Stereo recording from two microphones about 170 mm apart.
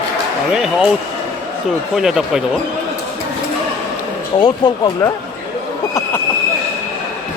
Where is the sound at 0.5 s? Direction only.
Centre (ahead or behind).